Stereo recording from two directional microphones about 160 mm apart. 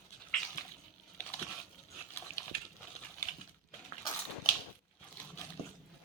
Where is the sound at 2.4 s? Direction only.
15° left (ahead or behind).